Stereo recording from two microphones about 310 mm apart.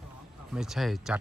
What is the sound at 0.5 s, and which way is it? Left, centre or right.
Speech, centre.